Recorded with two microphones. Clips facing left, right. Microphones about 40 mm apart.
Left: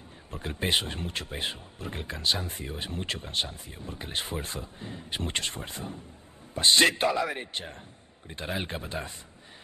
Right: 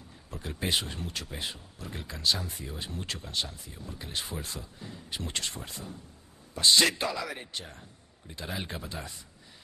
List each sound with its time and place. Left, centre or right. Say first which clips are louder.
0.3 s speech: left 3 dB; left